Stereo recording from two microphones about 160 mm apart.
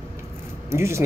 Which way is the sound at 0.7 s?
15° right (ahead or behind).